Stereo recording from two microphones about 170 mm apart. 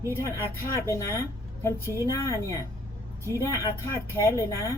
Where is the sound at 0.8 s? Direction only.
15° left (ahead or behind).